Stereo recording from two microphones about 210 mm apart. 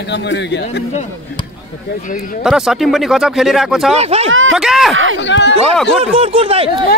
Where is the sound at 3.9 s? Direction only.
30° right (ahead or behind).